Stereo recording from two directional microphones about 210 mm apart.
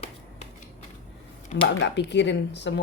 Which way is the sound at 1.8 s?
55° left (ahead or behind).